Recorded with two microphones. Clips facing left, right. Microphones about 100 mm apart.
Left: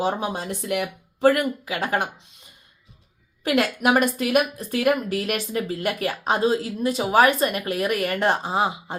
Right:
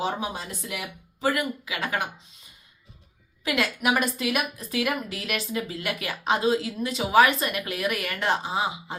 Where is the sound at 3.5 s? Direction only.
45° left (ahead or behind).